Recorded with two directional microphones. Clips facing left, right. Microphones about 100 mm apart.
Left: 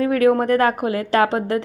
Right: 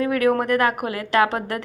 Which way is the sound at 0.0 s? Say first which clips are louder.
Left 3 dB; 30° left (ahead or behind).